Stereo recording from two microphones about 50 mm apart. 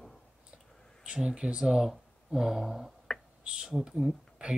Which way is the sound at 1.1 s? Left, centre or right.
Centre.